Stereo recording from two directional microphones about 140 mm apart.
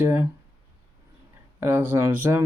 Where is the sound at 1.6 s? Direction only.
15° right (ahead or behind).